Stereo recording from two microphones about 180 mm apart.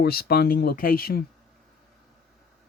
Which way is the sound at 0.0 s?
60° left (ahead or behind).